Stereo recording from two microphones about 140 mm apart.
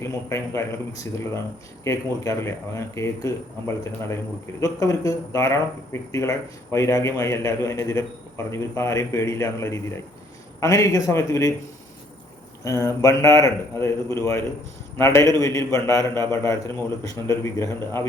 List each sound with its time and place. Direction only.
0.0 s speech: 20° left (ahead or behind)
12.6 s speech: 20° left (ahead or behind)